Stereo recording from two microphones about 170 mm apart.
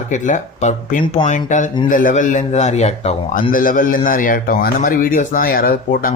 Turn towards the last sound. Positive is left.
turn(degrees=55)  # may be behind; listen again after turning